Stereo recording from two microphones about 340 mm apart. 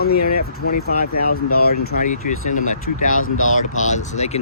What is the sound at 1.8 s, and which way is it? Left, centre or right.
Speech, left.